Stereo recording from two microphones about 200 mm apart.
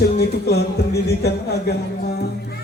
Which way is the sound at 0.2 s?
55° left (ahead or behind).